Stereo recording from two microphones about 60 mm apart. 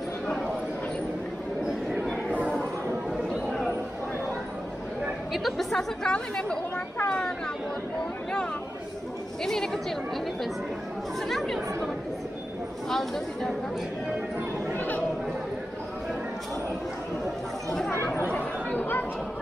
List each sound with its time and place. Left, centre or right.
3.1 s a sound: centre
5.3 s speech: centre
9.4 s speech: centre
11.1 s speech: centre
12.9 s speech: centre
17.6 s speech: centre
17.9 s speech: left
18.3 s chatter: left